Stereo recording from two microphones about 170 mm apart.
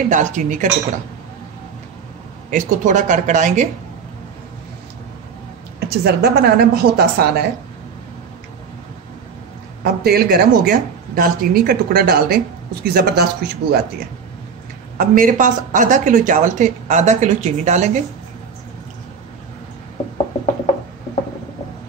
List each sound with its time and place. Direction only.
0.1 s speech: 45° right (ahead or behind)
2.5 s speech: 50° right (ahead or behind)
5.9 s a woman's voice: 70° right (ahead or behind)
9.8 s a woman's voice: 65° right (ahead or behind)
15.0 s speech: 55° right (ahead or behind)